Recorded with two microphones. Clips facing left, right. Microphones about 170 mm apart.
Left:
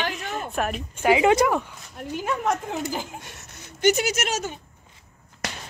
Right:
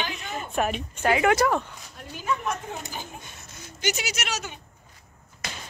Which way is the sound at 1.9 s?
65° left (ahead or behind).